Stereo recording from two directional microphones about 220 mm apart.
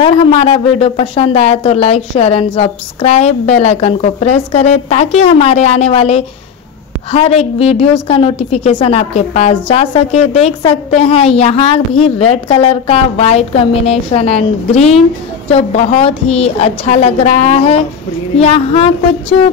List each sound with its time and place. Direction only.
0.0 s a woman's voice: 25° left (ahead or behind)